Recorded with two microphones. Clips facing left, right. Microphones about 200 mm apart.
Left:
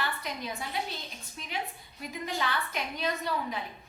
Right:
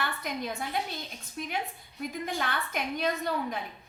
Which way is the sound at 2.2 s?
50° right (ahead or behind).